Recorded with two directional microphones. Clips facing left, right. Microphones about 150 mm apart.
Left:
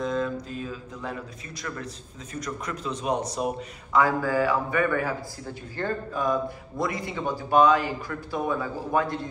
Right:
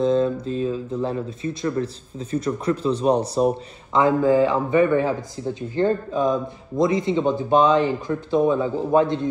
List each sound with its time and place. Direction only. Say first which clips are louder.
0.0 s speech: right 8 dB; 30° right (ahead or behind)